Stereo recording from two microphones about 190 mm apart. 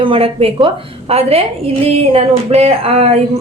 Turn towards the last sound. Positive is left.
turn(degrees=-30)  # may be behind; listen again after turning